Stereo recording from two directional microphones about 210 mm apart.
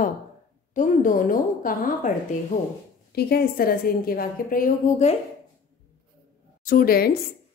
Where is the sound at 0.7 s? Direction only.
40° left (ahead or behind).